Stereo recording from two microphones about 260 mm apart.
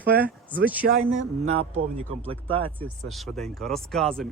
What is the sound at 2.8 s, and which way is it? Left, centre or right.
Speech, centre.